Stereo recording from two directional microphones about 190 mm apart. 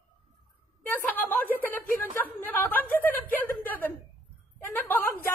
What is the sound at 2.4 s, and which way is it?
Chuckle, 10° left (ahead or behind).